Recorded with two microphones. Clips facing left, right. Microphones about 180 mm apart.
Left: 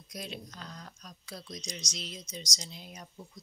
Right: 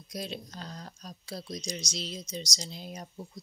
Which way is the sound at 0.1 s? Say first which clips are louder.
Right 4 dB; 35° right (ahead or behind).